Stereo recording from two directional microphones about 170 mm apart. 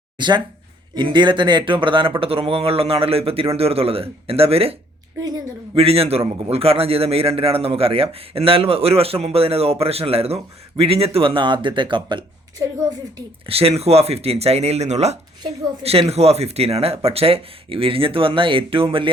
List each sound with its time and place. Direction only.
0.2 s a man's voice: 25° right (ahead or behind)
5.7 s a man's voice: 35° right (ahead or behind)